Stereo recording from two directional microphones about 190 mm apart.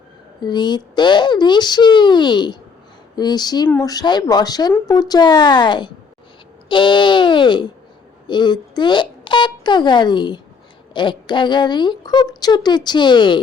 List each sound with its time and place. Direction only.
0.4 s speech: 25° left (ahead or behind)